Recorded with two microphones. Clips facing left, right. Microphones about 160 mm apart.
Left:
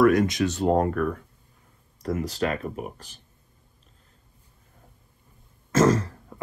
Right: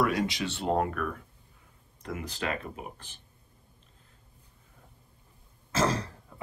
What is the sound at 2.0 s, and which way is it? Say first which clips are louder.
Speech: left 7 dB; 40° left (ahead or behind).